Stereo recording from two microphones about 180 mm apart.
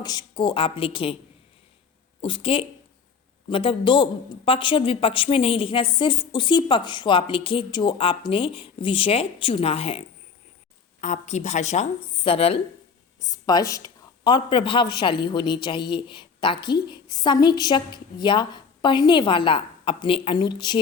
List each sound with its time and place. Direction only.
0.0 s a woman's voice: 25° left (ahead or behind)
2.2 s a woman's voice: 30° left (ahead or behind)
13.1 s a woman's voice: 20° left (ahead or behind)